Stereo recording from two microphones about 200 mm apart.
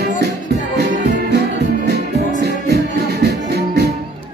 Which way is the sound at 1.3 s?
55° right (ahead or behind).